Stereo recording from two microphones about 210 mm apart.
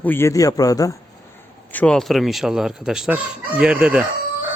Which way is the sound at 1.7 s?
5° left (ahead or behind).